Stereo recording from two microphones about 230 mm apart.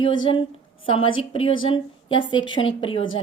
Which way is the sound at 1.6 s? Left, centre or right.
Left.